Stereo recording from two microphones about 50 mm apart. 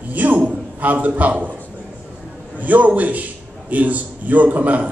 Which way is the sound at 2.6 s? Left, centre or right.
Right.